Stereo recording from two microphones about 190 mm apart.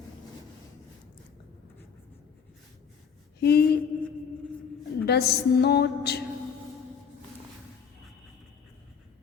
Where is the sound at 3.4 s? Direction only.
60° left (ahead or behind).